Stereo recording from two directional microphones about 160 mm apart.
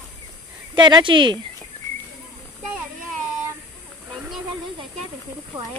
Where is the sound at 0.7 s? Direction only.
30° right (ahead or behind).